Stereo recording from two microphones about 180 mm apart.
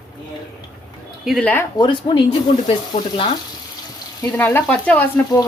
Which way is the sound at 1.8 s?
25° left (ahead or behind).